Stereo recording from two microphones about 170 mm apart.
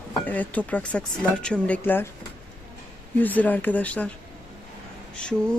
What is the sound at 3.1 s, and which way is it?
Speech, 10° left (ahead or behind).